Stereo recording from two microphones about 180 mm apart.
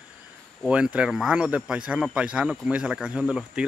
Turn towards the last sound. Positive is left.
turn(degrees=-5)  # may be behind; listen again after turning